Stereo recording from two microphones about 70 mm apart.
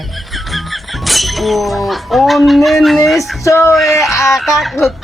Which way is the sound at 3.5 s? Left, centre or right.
Left.